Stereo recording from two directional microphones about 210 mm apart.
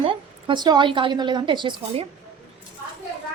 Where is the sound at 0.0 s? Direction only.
25° right (ahead or behind).